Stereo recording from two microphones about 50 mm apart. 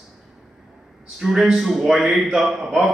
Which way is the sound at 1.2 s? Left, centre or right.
Centre.